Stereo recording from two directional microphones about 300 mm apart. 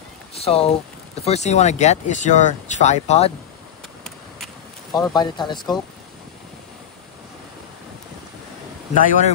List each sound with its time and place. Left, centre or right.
0.3 s speech: centre
4.9 s speech: centre
8.9 s speech: left